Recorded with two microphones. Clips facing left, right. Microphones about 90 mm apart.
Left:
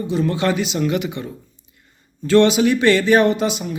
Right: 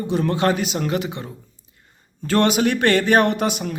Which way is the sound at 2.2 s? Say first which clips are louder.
Left 4 dB; 45° right (ahead or behind).